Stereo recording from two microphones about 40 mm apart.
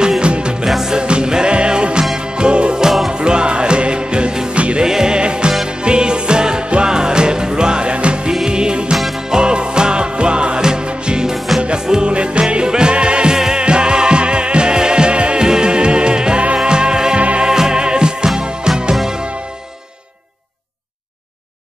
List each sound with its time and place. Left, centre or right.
0.2 s music: right
0.7 s music: centre
0.9 s music: right
4.8 s music: centre
11.3 s music: centre
11.8 s music: centre
12.1 s music: right